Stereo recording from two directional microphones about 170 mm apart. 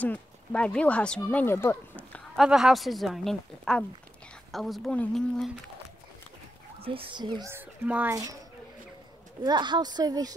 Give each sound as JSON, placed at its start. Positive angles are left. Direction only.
{"t": 0.0, "sound": "speech", "side_deg": 10}
{"t": 2.4, "sound": "a woman's voice", "side_deg": 0}
{"t": 6.8, "sound": "speech", "side_deg": -30}
{"t": 7.5, "sound": "a child's voice", "side_deg": -10}
{"t": 9.4, "sound": "speech", "side_deg": -25}